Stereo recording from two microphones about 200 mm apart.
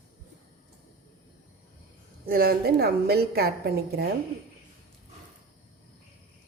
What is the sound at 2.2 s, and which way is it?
A woman's voice, 50° right (ahead or behind).